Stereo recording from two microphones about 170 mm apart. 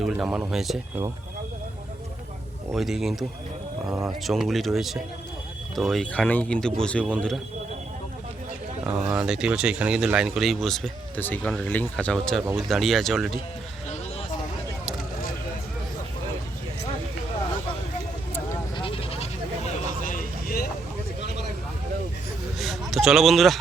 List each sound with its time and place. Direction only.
0.0 s speech: centre (ahead or behind)
2.7 s speech: centre (ahead or behind)
3.8 s speech: 15° right (ahead or behind)
4.2 s speech: centre (ahead or behind)
9.0 s speech: 5° right (ahead or behind)
18.8 s a sound: 35° left (ahead or behind)
20.0 s a sound: 55° left (ahead or behind)
22.5 s a sound: centre (ahead or behind)
22.9 s speech: centre (ahead or behind)